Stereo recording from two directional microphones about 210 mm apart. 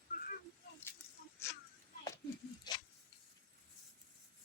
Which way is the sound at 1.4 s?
10° left (ahead or behind).